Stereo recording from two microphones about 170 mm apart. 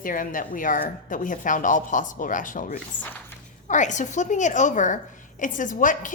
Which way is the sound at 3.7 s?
45° left (ahead or behind).